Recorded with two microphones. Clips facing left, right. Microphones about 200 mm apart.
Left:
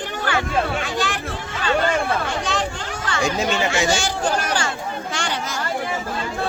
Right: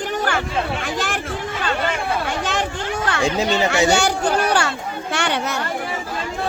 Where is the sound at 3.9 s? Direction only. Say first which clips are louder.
Right 4 dB; 65° right (ahead or behind).